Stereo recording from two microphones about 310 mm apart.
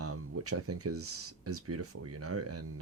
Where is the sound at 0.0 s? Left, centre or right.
Right.